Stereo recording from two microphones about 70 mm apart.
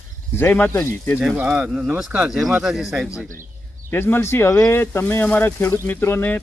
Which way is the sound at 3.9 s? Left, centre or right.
Left.